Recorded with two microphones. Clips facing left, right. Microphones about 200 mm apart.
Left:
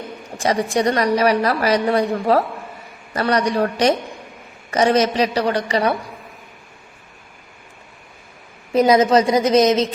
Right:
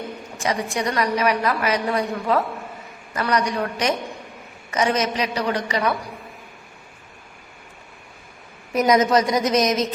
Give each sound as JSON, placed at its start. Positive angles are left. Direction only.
{"t": 0.3, "sound": "a woman's voice", "side_deg": 35}
{"t": 8.7, "sound": "a woman's voice", "side_deg": 30}